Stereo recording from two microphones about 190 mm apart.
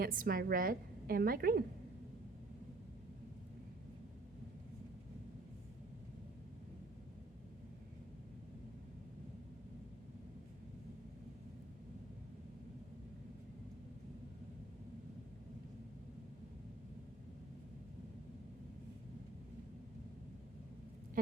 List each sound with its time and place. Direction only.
0.0 s a woman's voice: 50° right (ahead or behind)